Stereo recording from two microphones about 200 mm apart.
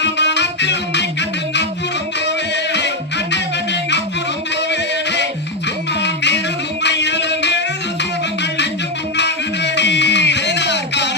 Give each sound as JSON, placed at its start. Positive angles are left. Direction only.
{"t": 0.0, "sound": "music", "side_deg": 60}
{"t": 3.3, "sound": "music", "side_deg": 60}
{"t": 6.0, "sound": "a sound", "side_deg": 60}
{"t": 6.8, "sound": "music", "side_deg": 60}
{"t": 9.1, "sound": "music", "side_deg": 60}